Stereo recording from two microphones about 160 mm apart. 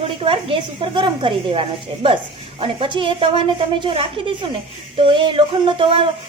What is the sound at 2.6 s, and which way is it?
Speech, 35° right (ahead or behind).